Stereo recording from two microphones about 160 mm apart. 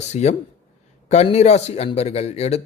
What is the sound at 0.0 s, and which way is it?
Speech, 45° left (ahead or behind).